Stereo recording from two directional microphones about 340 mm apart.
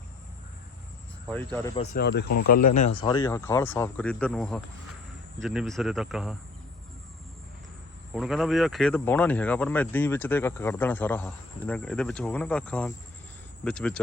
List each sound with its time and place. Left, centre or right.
1.5 s speech: centre
3.0 s speech: centre
8.1 s speech: centre